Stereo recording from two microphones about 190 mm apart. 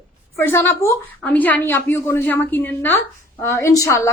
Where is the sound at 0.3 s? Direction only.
15° left (ahead or behind).